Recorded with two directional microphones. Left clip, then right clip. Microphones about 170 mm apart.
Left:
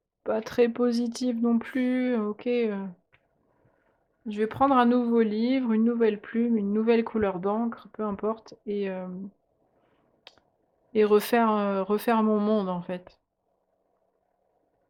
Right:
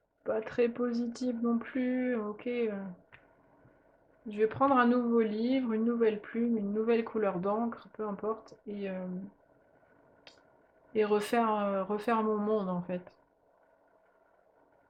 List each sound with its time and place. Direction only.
0.2 s speech: 60° left (ahead or behind)
4.3 s speech: 45° left (ahead or behind)
10.3 s a sound: 55° left (ahead or behind)
10.9 s speech: 60° left (ahead or behind)